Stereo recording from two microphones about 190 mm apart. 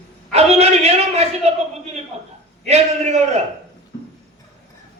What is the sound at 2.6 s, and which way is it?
Speech, 35° right (ahead or behind).